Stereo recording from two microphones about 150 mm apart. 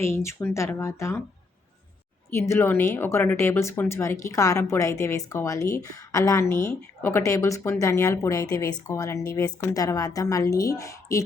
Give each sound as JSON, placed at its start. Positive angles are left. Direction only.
{"t": 0.0, "sound": "speech", "side_deg": 20}
{"t": 2.3, "sound": "speech", "side_deg": 15}